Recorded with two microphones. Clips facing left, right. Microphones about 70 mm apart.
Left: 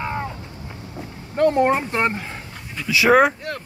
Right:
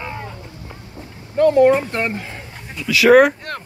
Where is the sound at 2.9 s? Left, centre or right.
Centre.